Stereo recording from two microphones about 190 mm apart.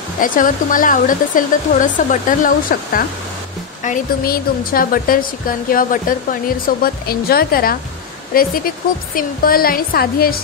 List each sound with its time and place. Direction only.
0.2 s speech: 45° left (ahead or behind)